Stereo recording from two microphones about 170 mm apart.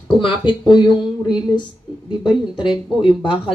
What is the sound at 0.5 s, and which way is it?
Speech, 25° left (ahead or behind).